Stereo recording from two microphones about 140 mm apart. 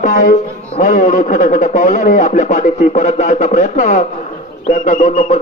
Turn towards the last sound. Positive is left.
turn(degrees=65)  # may be behind; listen again after turning